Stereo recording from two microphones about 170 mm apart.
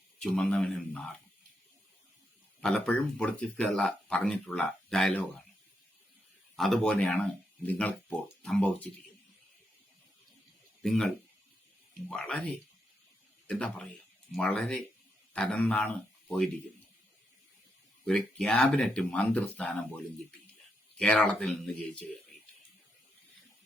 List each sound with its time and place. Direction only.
0.2 s speech: 5° left (ahead or behind)
2.6 s speech: 5° left (ahead or behind)
6.6 s speech: 5° left (ahead or behind)
10.8 s speech: 5° left (ahead or behind)
12.1 s speech: 5° left (ahead or behind)
18.0 s speech: 5° left (ahead or behind)
21.0 s speech: 5° left (ahead or behind)